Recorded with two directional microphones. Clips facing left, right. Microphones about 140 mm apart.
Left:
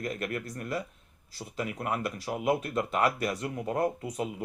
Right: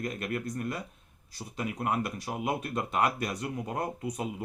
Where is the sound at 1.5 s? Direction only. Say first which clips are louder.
Right 1 dB; 20° right (ahead or behind).